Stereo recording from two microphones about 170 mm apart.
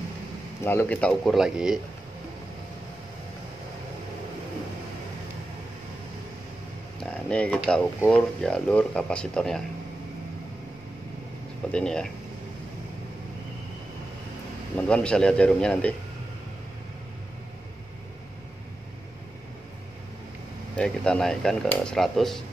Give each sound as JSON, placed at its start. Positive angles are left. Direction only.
{"t": 0.6, "sound": "speech", "side_deg": 15}
{"t": 7.0, "sound": "speech", "side_deg": 5}
{"t": 11.7, "sound": "speech", "side_deg": 5}
{"t": 14.8, "sound": "a man's voice", "side_deg": 5}
{"t": 20.7, "sound": "speech", "side_deg": 5}